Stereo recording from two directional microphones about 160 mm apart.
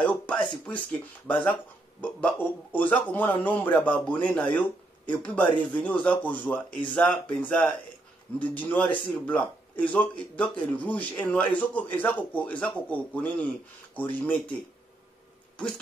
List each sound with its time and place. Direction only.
0.3 s speech: 10° left (ahead or behind)